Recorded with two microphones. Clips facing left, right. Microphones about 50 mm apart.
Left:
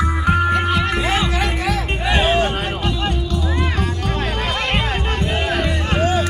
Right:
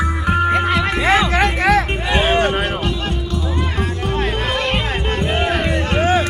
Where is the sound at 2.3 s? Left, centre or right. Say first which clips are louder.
Right 2 dB; centre.